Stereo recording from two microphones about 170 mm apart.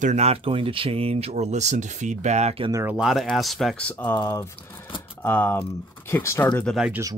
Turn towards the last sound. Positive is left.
turn(degrees=-5)  # may be behind; listen again after turning